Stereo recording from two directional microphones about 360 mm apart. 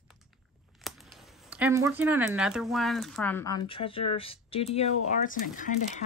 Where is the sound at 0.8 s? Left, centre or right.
Centre.